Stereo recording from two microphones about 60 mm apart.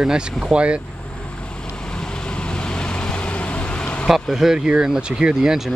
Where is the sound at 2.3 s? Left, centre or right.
Centre.